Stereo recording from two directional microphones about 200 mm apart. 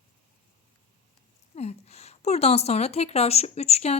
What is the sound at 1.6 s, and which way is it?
Speech, 30° left (ahead or behind).